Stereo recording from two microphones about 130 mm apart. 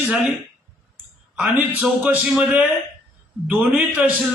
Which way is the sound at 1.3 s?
5° right (ahead or behind).